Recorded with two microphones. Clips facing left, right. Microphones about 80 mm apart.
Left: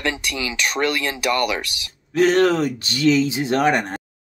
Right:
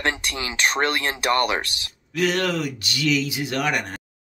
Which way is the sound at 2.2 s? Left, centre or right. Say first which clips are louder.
Left 7 dB; left.